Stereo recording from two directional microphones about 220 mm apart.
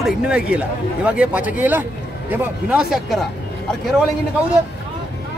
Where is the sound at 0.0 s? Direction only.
5° right (ahead or behind).